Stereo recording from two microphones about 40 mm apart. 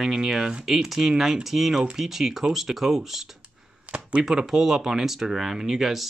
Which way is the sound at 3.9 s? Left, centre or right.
Right.